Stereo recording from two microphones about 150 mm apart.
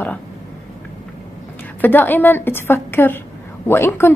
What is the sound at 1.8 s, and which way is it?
A woman's voice, 10° left (ahead or behind).